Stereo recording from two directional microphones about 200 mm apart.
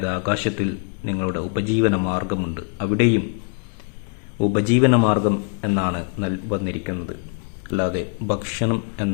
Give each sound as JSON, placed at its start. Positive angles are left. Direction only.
{"t": 0.0, "sound": "speech", "side_deg": -30}
{"t": 4.4, "sound": "a man's voice", "side_deg": -25}